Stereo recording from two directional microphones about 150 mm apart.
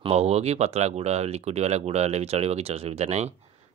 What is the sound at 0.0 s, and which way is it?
Speech, 45° right (ahead or behind).